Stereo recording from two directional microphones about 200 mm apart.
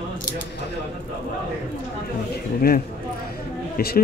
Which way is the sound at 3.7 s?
50° left (ahead or behind).